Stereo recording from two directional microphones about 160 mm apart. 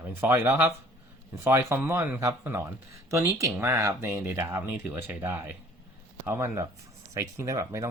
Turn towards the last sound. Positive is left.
turn(degrees=-20)  # may be behind; listen again after turning